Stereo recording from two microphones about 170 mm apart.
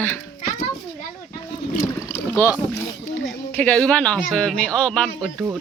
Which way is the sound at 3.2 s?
10° left (ahead or behind).